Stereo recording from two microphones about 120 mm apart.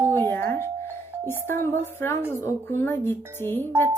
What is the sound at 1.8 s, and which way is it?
A woman's voice, 20° left (ahead or behind).